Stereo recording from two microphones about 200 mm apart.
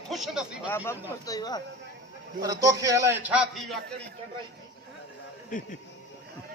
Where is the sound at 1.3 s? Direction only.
20° left (ahead or behind).